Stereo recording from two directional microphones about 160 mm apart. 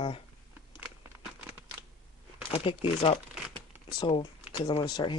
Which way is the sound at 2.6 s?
35° left (ahead or behind).